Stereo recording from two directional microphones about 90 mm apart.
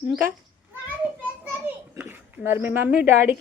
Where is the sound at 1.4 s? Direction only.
20° right (ahead or behind).